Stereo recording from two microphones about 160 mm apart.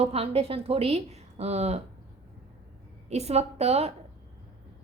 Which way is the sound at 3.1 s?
40° right (ahead or behind).